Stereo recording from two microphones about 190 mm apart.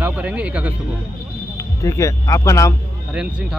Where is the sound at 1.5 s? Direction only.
15° left (ahead or behind).